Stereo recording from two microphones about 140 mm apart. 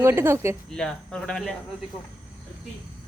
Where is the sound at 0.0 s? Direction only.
20° right (ahead or behind).